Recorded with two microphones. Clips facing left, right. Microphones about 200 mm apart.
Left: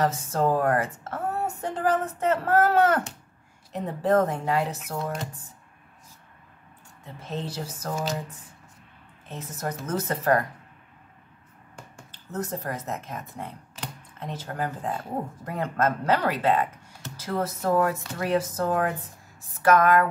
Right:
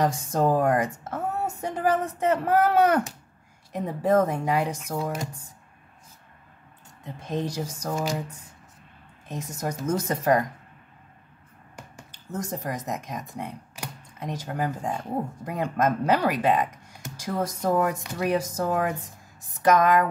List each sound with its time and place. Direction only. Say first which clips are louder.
0.0 s speech: right 1 dB; 15° right (ahead or behind)
7.1 s speech: right 4 dB; 15° right (ahead or behind)
12.1 s speech: left 1 dB; 10° right (ahead or behind)